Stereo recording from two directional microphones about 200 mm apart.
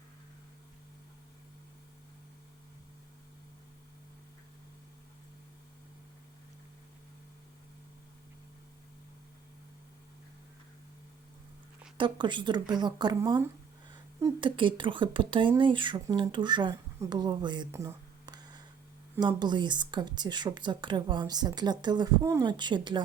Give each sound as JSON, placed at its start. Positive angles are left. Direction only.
{"t": 11.9, "sound": "a woman's voice", "side_deg": -25}